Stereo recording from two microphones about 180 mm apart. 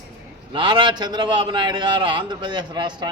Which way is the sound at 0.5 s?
25° right (ahead or behind).